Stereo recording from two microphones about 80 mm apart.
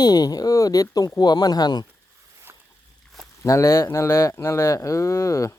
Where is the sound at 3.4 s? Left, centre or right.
Left.